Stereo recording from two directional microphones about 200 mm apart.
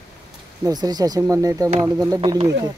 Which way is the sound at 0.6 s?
20° right (ahead or behind).